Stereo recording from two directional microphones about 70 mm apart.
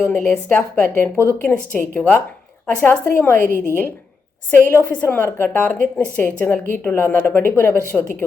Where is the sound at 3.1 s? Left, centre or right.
Left.